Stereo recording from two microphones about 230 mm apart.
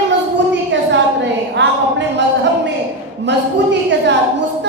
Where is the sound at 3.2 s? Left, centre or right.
Right.